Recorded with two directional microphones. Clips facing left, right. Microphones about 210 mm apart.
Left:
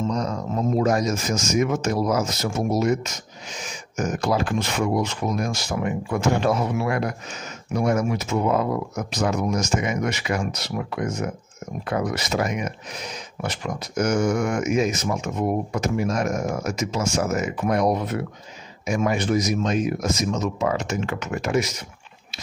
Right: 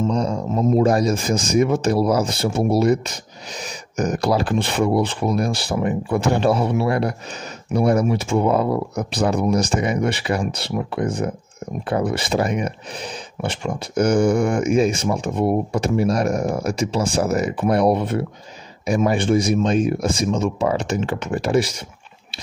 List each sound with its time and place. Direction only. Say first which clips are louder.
0.1 s speech: right 4 dB; 30° right (ahead or behind)